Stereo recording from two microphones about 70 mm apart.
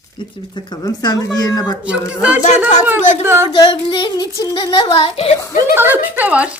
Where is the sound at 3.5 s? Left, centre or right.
Left.